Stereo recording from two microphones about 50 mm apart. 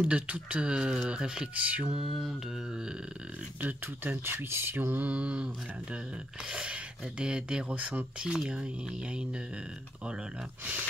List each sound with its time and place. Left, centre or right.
0.0 s speech: right
1.5 s speech: right
2.0 s mantra: centre
3.6 s speech: right
4.5 s speech: right
5.1 s speech: right
6.5 s speech: right
7.7 s speech: right
8.2 s speech: centre